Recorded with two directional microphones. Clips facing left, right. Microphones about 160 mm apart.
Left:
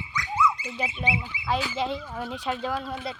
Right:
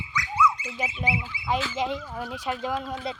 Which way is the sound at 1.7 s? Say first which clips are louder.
Even; 15° right (ahead or behind).